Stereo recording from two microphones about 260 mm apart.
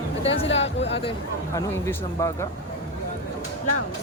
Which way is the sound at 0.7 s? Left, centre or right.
Left.